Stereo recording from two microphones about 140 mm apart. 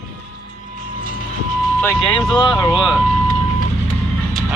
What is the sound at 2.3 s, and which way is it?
Speech, 30° left (ahead or behind).